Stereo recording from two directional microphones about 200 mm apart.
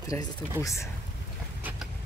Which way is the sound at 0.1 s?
10° left (ahead or behind).